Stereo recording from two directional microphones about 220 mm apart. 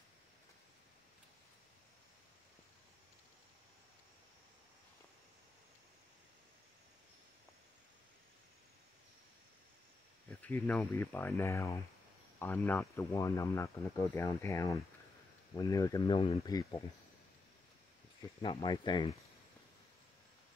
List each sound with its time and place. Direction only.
10.4 s speech: 5° left (ahead or behind)
18.4 s speech: 20° left (ahead or behind)